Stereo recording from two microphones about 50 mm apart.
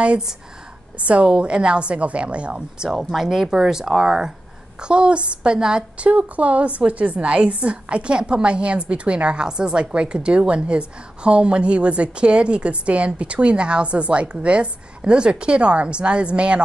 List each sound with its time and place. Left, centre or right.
1.0 s a woman's voice: right
6.0 s a woman's voice: right